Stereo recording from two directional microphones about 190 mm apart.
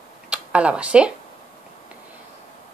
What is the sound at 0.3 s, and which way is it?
Speech, 5° right (ahead or behind).